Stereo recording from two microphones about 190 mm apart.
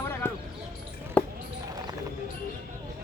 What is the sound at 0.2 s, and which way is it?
Speech, 10° left (ahead or behind).